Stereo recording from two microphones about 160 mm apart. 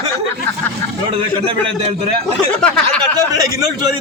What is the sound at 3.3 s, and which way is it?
Speech, 25° right (ahead or behind).